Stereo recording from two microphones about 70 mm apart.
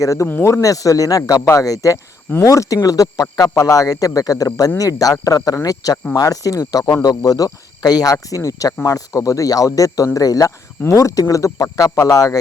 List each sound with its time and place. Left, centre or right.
0.0 s speech: left
2.7 s speech: left
7.0 s speech: left
8.1 s speech: left